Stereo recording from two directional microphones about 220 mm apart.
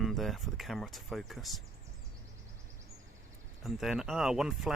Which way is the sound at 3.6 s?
Centre (ahead or behind).